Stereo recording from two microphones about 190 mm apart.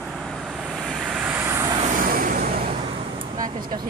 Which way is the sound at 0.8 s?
Centre (ahead or behind).